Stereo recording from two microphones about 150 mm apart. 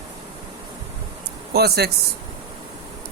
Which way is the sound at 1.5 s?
90° right.